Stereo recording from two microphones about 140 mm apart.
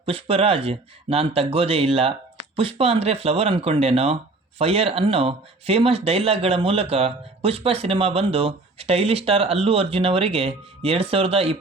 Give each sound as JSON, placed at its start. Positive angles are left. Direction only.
{"t": 0.0, "sound": "speech", "side_deg": -40}